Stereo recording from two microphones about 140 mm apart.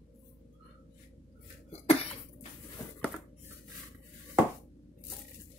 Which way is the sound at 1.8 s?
45° left (ahead or behind).